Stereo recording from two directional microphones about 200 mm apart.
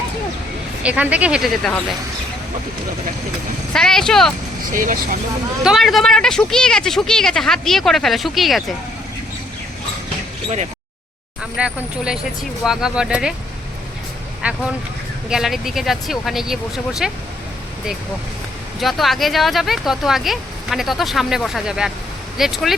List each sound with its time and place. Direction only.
0.8 s speech: 5° right (ahead or behind)
3.7 s speech: 5° left (ahead or behind)
4.7 s speech: 40° right (ahead or behind)
5.6 s speech: centre (ahead or behind)
11.5 s speech: 5° right (ahead or behind)
14.4 s speech: 5° right (ahead or behind)
18.8 s speech: centre (ahead or behind)